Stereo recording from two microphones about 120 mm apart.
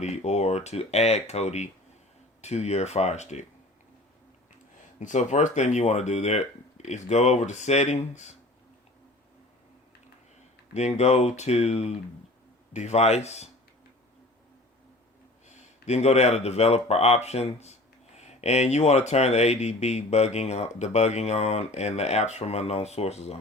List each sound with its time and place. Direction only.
0.0 s speech: 65° left (ahead or behind)
4.9 s speech: 80° left; by 8.4 s 65° left (ahead or behind)
10.8 s speech: 65° left (ahead or behind)
15.4 s speech: 70° left (ahead or behind)